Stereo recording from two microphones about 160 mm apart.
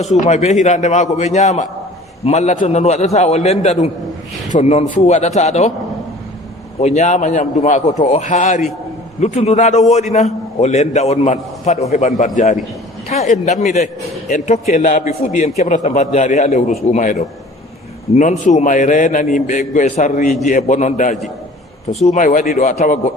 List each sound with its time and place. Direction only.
0.0 s a man's voice: 45° left (ahead or behind)
6.7 s a man's voice: 45° left (ahead or behind)